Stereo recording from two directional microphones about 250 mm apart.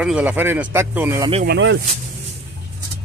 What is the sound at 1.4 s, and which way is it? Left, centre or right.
Speech, right.